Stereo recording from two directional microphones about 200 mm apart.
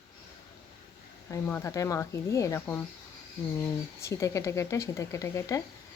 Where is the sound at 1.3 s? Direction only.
10° left (ahead or behind).